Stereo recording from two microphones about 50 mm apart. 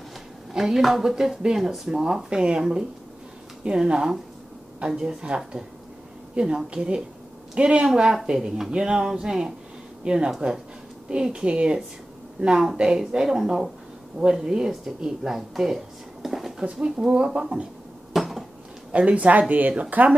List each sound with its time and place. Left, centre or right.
0.5 s a woman's voice: centre
16.8 s speech: centre
18.1 s dishes: centre
18.9 s speech: right